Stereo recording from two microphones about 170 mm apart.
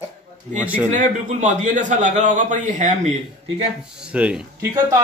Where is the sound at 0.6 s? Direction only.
10° right (ahead or behind).